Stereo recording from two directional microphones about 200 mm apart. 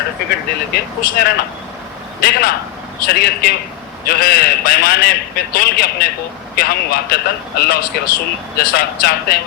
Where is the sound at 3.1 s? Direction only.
50° left (ahead or behind).